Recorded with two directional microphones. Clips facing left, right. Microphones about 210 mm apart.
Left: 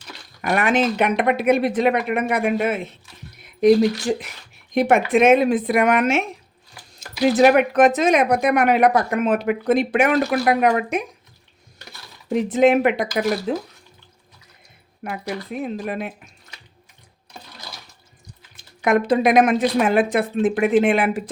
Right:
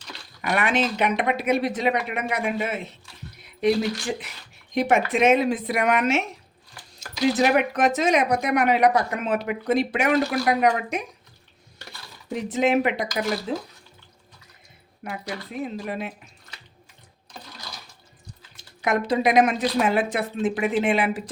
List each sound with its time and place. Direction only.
0.4 s speech: 45° left (ahead or behind)
3.6 s speech: 45° left (ahead or behind)
4.7 s speech: 55° left (ahead or behind)
7.3 s speech: 55° left (ahead or behind)
12.3 s speech: 55° left (ahead or behind)
15.0 s speech: 55° left (ahead or behind)
18.5 s speech: 55° left (ahead or behind)